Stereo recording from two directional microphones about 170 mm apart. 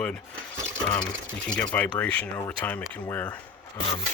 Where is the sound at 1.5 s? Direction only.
10° left (ahead or behind).